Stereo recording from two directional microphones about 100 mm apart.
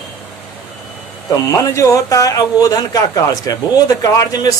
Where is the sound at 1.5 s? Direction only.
30° left (ahead or behind).